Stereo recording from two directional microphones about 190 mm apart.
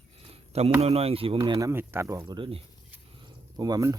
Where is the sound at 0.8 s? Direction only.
30° right (ahead or behind).